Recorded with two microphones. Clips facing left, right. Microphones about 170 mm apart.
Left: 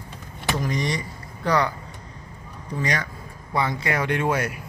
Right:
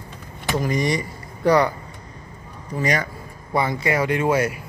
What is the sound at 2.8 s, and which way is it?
Speech, 10° right (ahead or behind).